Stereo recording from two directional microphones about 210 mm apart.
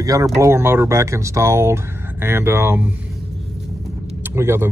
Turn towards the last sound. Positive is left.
turn(degrees=-10)  # may be behind; listen again after turning